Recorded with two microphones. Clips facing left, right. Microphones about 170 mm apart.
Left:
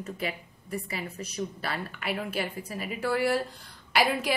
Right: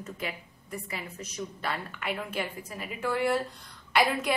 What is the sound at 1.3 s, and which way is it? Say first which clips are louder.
A woman's voice: even; 35° left (ahead or behind).